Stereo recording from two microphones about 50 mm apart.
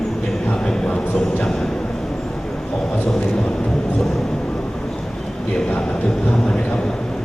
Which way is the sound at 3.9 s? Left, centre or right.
Centre.